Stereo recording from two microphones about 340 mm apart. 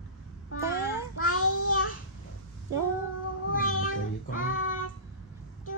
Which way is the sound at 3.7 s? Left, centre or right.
Left.